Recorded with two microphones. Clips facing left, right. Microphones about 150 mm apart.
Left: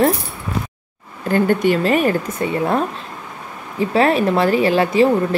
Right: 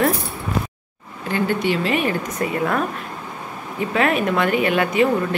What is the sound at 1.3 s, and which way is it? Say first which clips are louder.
Speech: left 5 dB; 45° left (ahead or behind).